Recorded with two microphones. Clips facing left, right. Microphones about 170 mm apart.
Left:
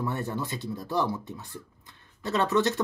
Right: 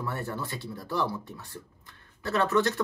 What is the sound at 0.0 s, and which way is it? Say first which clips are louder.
Speech: left 3 dB; 20° left (ahead or behind).